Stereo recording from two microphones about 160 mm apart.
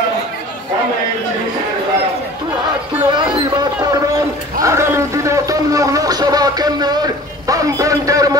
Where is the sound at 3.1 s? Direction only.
25° right (ahead or behind).